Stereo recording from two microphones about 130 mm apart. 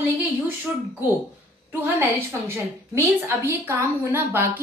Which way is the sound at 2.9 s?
20° right (ahead or behind).